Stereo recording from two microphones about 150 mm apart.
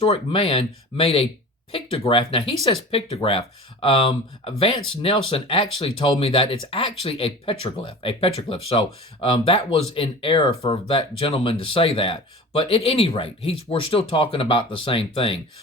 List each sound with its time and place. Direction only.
0.0 s speech: 40° left (ahead or behind)